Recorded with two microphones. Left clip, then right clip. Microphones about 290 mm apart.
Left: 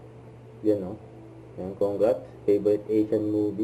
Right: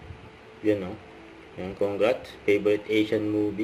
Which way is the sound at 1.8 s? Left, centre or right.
Right.